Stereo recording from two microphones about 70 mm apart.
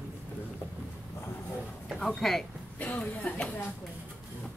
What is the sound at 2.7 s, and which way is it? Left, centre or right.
Speech, left.